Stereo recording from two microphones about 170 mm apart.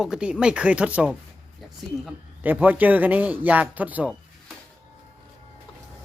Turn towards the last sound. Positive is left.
turn(degrees=-10)  # may be behind; listen again after turning